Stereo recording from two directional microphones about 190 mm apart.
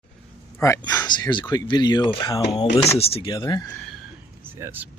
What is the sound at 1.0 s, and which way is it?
Speech, 25° left (ahead or behind).